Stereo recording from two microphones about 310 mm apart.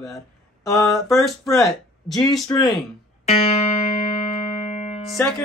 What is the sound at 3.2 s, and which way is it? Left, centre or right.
Music, left.